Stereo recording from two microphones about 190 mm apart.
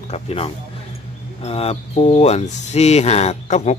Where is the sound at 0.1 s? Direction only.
30° left (ahead or behind).